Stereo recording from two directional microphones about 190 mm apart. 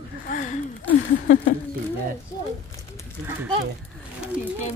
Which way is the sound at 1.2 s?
45° left (ahead or behind).